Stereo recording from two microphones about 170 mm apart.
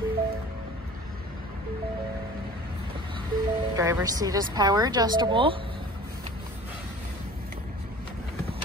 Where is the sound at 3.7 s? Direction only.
20° right (ahead or behind).